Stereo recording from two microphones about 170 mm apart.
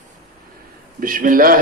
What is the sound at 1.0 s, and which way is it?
Speech, 55° right (ahead or behind).